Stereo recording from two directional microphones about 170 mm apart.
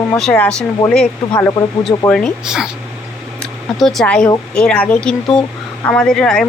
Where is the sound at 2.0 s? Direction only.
5° left (ahead or behind).